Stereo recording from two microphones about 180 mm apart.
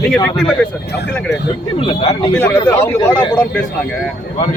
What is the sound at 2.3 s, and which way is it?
Speech, 10° left (ahead or behind).